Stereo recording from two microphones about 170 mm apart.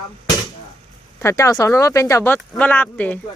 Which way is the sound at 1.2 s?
20° left (ahead or behind).